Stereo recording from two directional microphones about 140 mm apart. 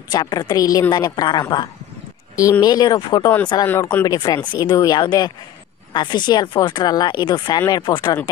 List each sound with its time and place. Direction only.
0.1 s a woman's voice: 30° left (ahead or behind)